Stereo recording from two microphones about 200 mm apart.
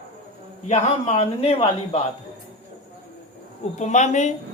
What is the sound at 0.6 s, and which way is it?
A woman's voice, 35° left (ahead or behind).